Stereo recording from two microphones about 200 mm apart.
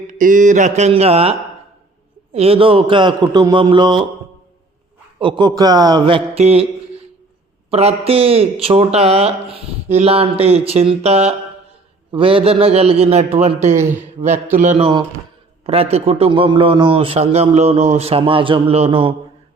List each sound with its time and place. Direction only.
0.1 s a man's voice: 40° right (ahead or behind); by 4.0 s 25° right (ahead or behind)
5.2 s speech: 25° right (ahead or behind)
7.7 s a man's voice: 30° right (ahead or behind)
14.3 s speech: 10° right (ahead or behind)
14.6 s a man's voice: 40° right (ahead or behind)